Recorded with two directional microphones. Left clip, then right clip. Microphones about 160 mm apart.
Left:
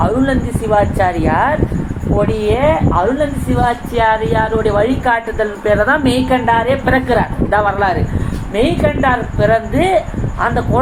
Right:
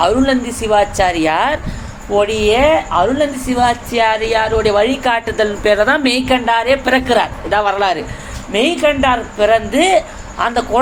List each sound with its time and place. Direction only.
0.0 s a woman's voice: 45° right (ahead or behind)
2.6 s a woman's voice: 40° right (ahead or behind)